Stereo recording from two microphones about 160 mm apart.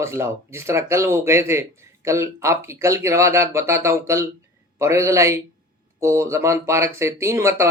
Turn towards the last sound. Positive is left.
turn(degrees=-15)  # may be behind; listen again after turning